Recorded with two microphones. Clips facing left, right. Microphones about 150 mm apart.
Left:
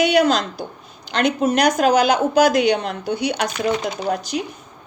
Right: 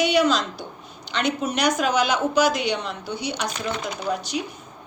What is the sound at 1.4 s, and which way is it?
A woman's voice, 50° left (ahead or behind).